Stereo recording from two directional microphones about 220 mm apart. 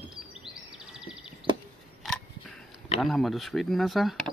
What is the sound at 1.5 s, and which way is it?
Chop, 20° right (ahead or behind).